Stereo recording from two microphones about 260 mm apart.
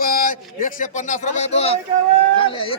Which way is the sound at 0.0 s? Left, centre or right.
Left.